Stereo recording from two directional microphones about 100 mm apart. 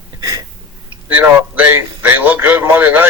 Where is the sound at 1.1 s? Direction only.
15° right (ahead or behind).